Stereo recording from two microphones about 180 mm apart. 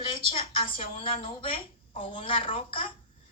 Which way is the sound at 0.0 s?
30° left (ahead or behind).